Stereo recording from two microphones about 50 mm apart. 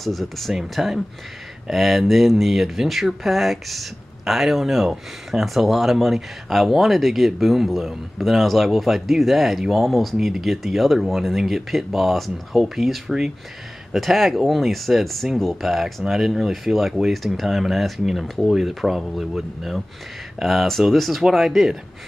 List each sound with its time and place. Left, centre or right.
0.0 s speech: centre